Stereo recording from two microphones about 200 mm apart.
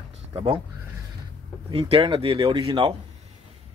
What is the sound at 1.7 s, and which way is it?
Speech, 30° right (ahead or behind).